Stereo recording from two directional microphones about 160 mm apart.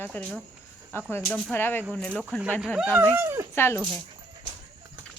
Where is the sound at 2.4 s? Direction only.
5° right (ahead or behind).